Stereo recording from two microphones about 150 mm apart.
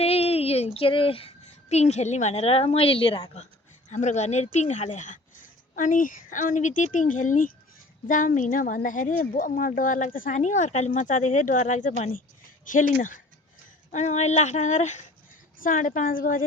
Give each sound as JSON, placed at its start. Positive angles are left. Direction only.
{"t": 0.0, "sound": "a sound", "side_deg": 40}
{"t": 0.8, "sound": "a woman's voice", "side_deg": 35}
{"t": 3.8, "sound": "a woman's voice", "side_deg": 50}
{"t": 15.5, "sound": "a woman's voice", "side_deg": 60}